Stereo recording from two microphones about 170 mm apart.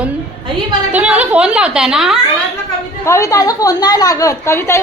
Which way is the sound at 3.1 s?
15° left (ahead or behind).